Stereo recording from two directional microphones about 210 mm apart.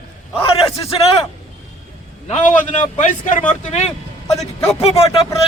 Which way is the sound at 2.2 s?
35° left (ahead or behind).